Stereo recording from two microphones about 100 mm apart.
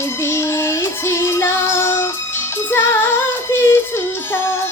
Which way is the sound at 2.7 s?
25° left (ahead or behind).